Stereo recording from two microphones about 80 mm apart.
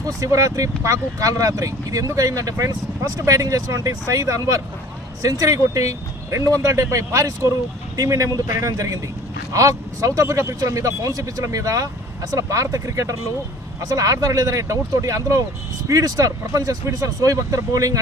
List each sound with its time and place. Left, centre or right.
0.2 s speech: right